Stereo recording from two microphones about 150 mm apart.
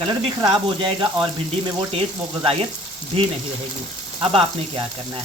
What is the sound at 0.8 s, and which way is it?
Speech, 35° right (ahead or behind).